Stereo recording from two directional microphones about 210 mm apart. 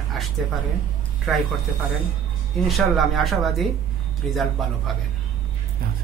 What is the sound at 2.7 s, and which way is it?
Speech, centre (ahead or behind).